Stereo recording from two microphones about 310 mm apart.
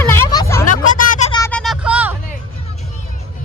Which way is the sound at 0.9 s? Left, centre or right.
Left.